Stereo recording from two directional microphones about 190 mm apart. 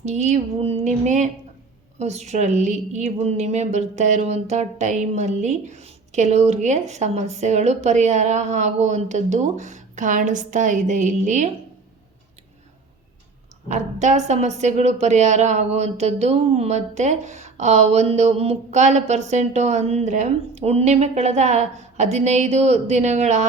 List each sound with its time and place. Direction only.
0.0 s a woman's voice: 35° right (ahead or behind)
13.7 s a woman's voice: 40° right (ahead or behind)